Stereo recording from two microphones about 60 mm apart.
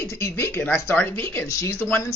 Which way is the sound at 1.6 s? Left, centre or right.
Left.